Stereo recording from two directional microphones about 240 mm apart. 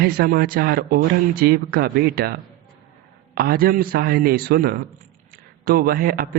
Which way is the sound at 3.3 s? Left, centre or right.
Right.